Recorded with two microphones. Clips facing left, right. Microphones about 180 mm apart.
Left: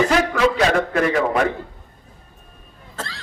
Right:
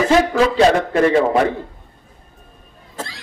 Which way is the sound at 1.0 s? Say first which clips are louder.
Right 5 dB; 25° right (ahead or behind).